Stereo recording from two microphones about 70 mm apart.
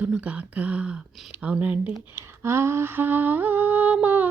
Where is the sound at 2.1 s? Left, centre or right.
Right.